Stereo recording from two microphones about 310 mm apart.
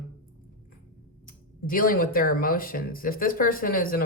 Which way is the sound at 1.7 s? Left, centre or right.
Left.